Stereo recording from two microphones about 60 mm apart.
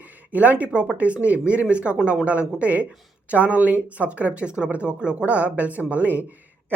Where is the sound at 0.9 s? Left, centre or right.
Right.